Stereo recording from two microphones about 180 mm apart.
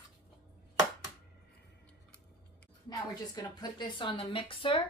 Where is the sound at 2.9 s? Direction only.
20° left (ahead or behind).